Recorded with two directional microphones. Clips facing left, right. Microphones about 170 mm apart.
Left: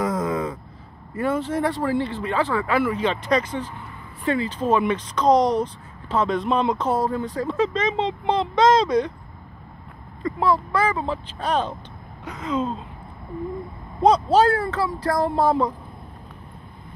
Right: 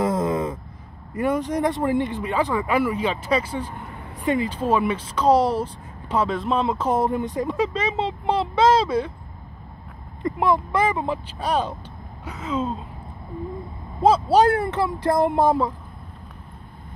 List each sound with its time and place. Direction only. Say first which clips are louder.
0.0 s a sound: right 2 dB; 25° right (ahead or behind)
1.1 s speech: right 1 dB; 15° right (ahead or behind)
6.9 s speech: right 1 dB; 20° right (ahead or behind)
10.2 s speech: even; 20° right (ahead or behind)
14.0 s speech: even; 5° right (ahead or behind)